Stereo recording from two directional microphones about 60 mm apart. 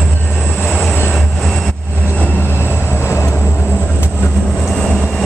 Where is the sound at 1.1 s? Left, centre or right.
Centre.